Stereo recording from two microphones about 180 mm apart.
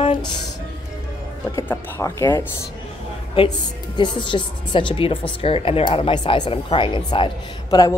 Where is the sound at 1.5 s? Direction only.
15° left (ahead or behind).